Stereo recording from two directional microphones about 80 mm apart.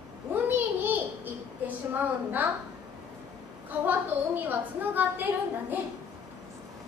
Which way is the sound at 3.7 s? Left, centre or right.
Right.